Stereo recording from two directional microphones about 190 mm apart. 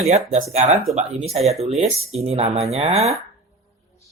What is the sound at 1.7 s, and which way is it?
Speech, 35° right (ahead or behind).